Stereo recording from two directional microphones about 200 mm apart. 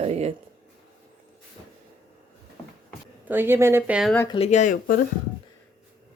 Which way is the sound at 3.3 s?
10° right (ahead or behind).